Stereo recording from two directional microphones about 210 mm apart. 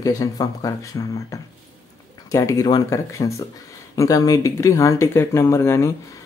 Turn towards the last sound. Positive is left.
turn(degrees=15)  # may be behind; listen again after turning